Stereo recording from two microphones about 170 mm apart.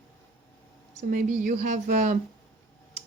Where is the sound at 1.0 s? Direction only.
55° right (ahead or behind).